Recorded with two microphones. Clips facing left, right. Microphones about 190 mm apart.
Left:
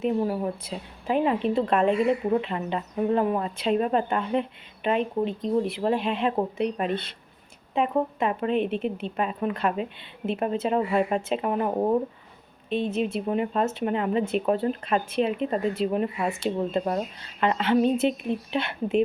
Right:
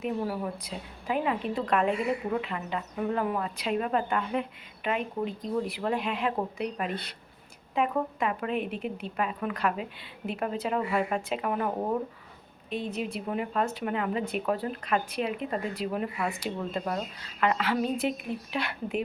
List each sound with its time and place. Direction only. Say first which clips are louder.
0.0 s a woman's voice: left 6 dB; 25° left (ahead or behind)
12.7 s a woman's voice: left 7 dB; 25° left (ahead or behind)